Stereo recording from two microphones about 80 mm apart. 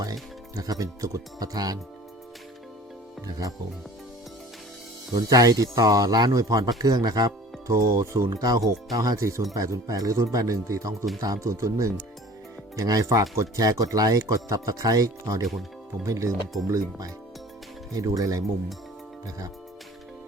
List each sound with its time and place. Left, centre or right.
0.0 s speech: right
3.2 s speech: right
5.1 s speech: right
7.9 s speech: right
8.3 s speech: right